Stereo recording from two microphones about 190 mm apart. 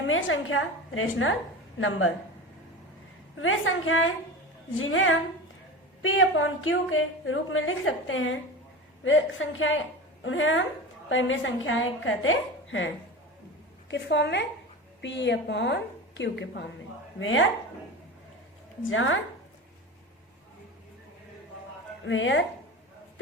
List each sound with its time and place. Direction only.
0.1 s speech: 90° left
3.4 s a woman's voice: 90° left
13.9 s a woman's voice: 65° left (ahead or behind)
17.2 s a woman's voice: 90° left
18.8 s speech: 90° left
22.0 s a woman's voice: 80° left